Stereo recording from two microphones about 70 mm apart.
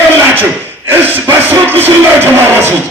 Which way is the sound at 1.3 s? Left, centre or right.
Right.